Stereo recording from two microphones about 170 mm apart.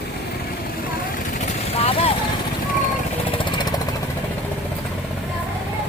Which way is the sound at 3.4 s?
25° left (ahead or behind).